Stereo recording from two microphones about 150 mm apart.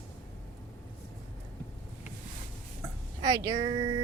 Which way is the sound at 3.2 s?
25° right (ahead or behind).